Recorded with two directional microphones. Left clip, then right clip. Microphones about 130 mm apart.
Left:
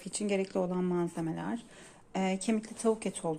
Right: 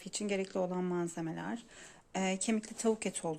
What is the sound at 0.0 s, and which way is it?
A woman's voice, 10° right (ahead or behind).